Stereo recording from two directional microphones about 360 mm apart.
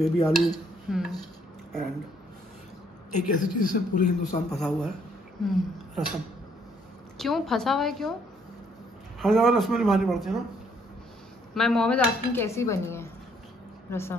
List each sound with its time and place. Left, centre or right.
0.0 s a man's voice: centre
3.3 s a man's voice: left
4.5 s a man's voice: centre
7.2 s a man's voice: centre
9.2 s a man's voice: centre
11.5 s a woman's voice: centre